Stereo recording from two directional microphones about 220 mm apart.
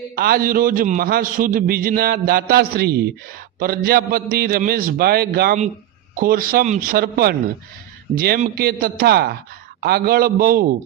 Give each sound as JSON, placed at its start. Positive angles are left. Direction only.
{"t": 0.2, "sound": "a man's voice", "side_deg": -40}